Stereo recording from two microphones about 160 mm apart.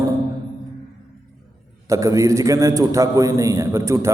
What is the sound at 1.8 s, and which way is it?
A man's voice, 20° right (ahead or behind).